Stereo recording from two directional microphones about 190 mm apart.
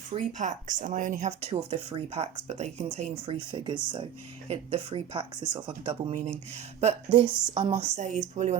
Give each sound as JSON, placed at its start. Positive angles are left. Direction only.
{"t": 0.1, "sound": "speech", "side_deg": -40}
{"t": 7.9, "sound": "speech", "side_deg": -40}